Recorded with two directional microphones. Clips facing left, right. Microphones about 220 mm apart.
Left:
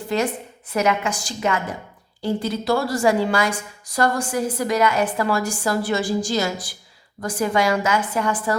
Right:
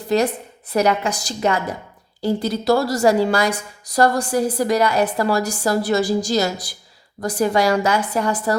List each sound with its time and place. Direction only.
0.1 s a woman's voice: 40° right (ahead or behind)